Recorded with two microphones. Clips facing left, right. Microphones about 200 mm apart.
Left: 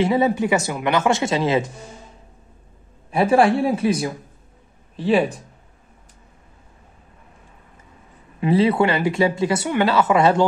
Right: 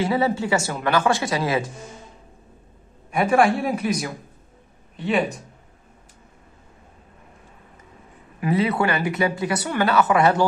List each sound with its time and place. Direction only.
0.0 s speech: 20° left (ahead or behind)
3.1 s speech: 30° left (ahead or behind)
8.4 s speech: 25° left (ahead or behind)